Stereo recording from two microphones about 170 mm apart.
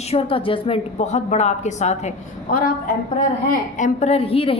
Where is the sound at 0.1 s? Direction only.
35° left (ahead or behind).